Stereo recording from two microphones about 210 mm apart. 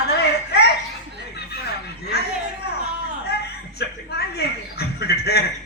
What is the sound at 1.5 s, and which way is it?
Speech, 50° left (ahead or behind).